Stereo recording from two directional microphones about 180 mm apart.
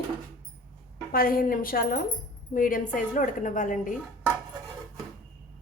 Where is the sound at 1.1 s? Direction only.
55° left (ahead or behind).